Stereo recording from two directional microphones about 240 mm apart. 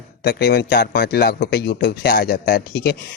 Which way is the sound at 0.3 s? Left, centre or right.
Left.